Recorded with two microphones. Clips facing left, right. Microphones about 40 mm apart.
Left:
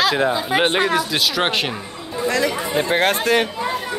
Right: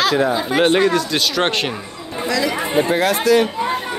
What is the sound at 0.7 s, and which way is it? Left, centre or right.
Speech, left.